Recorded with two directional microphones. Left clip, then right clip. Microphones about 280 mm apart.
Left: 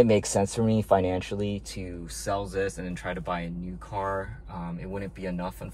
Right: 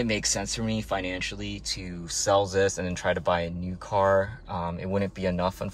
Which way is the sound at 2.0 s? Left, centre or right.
Centre.